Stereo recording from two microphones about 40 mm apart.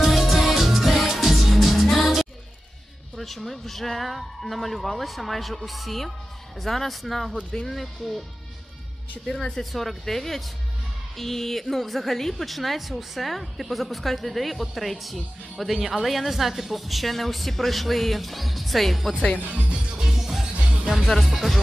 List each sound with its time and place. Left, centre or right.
0.0 s music: centre
3.2 s a woman's voice: centre
9.6 s a woman's voice: centre
19.5 s speech: right
20.0 s music: centre
21.0 s a woman's voice: centre